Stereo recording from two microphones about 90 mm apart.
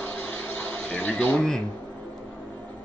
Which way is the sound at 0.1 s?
15° left (ahead or behind).